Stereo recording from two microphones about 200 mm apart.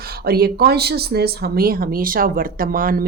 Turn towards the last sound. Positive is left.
turn(degrees=-45)  # may be behind; listen again after turning